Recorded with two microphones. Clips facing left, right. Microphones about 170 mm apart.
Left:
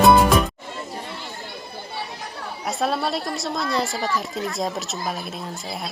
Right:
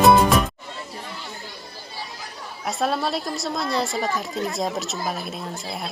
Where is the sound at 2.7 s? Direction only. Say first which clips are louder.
Even; centre (ahead or behind).